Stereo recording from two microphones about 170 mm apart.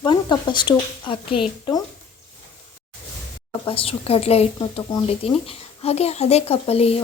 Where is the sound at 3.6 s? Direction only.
35° left (ahead or behind).